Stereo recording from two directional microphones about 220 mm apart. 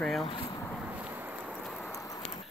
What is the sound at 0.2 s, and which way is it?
Speech, 20° left (ahead or behind).